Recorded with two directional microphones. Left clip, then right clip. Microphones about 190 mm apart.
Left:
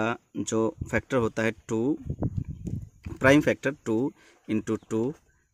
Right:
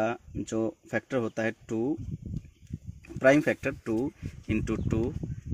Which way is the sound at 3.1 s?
45° left (ahead or behind).